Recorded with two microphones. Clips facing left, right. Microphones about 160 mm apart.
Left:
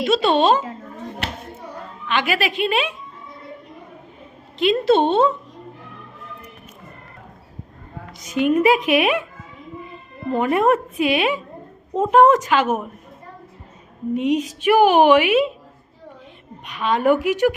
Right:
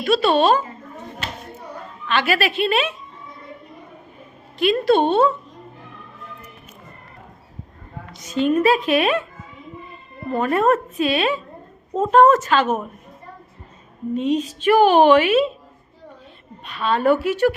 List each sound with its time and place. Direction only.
0.0 s a woman's voice: 20° left (ahead or behind)
1.2 s a sound: 65° left (ahead or behind)
2.0 s a woman's voice: 15° left (ahead or behind)
4.5 s a woman's voice: 20° left (ahead or behind)
8.2 s a woman's voice: 10° left (ahead or behind)
10.3 s a woman's voice: 15° left (ahead or behind)
14.1 s a woman's voice: 15° left (ahead or behind)
16.6 s a woman's voice: 15° left (ahead or behind)